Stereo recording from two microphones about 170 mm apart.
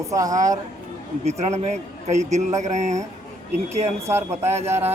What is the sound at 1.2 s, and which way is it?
A man's voice, 40° right (ahead or behind).